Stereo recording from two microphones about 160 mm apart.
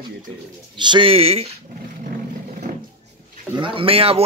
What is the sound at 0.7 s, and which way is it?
Speech, 30° right (ahead or behind).